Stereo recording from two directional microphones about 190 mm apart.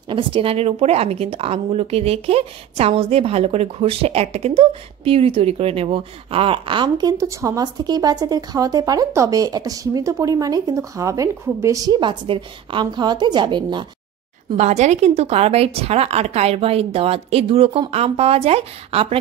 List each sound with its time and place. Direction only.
0.1 s a woman's voice: 30° right (ahead or behind)
14.6 s a woman's voice: 35° right (ahead or behind)